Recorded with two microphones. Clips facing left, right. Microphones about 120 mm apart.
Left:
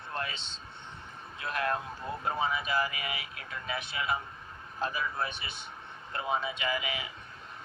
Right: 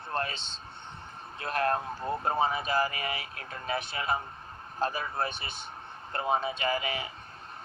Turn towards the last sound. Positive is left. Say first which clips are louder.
# right 3 dB
turn(degrees=-40)  # may be behind; listen again after turning